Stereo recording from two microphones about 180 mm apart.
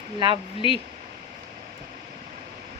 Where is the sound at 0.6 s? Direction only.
30° left (ahead or behind).